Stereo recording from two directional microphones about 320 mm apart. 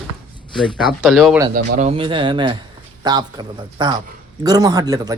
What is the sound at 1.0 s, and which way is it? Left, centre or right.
Speech, centre.